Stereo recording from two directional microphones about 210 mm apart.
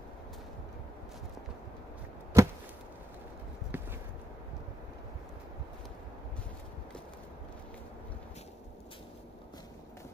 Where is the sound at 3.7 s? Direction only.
10° right (ahead or behind).